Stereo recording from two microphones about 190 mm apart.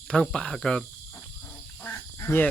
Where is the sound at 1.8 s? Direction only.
15° left (ahead or behind).